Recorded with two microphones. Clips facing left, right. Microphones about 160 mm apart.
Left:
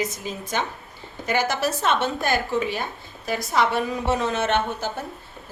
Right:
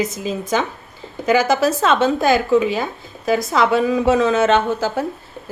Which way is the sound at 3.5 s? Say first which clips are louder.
Right 4 dB; 90° right.